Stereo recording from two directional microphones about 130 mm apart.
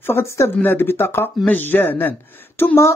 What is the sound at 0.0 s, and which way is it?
Speech, 20° left (ahead or behind).